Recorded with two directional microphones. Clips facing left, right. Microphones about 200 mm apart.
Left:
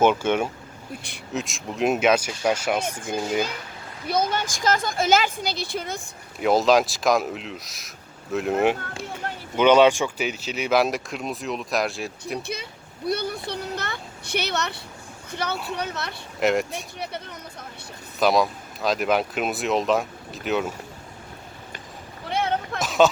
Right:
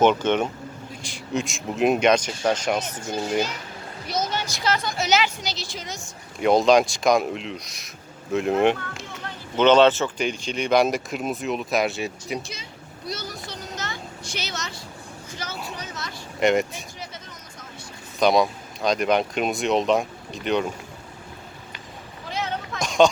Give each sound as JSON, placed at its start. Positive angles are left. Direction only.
{"t": 0.0, "sound": "speech", "side_deg": 10}
{"t": 4.0, "sound": "a woman's voice", "side_deg": 55}
{"t": 6.4, "sound": "speech", "side_deg": 0}
{"t": 9.2, "sound": "a sound", "side_deg": 45}
{"t": 9.6, "sound": "speech", "side_deg": 10}
{"t": 12.4, "sound": "speech", "side_deg": 60}
{"t": 13.1, "sound": "a sound", "side_deg": 60}
{"t": 15.3, "sound": "vehicle", "side_deg": 60}
{"t": 15.7, "sound": "speech", "side_deg": 60}
{"t": 16.4, "sound": "speech", "side_deg": 0}
{"t": 18.2, "sound": "speech", "side_deg": 0}
{"t": 22.3, "sound": "a sound", "side_deg": 55}
{"t": 22.8, "sound": "a sound", "side_deg": 5}